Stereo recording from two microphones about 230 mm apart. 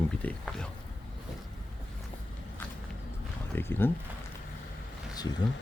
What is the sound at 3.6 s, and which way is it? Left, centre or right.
Speech, centre.